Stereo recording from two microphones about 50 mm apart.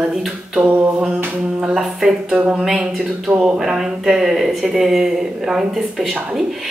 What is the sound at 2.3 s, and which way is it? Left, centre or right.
Speech, right.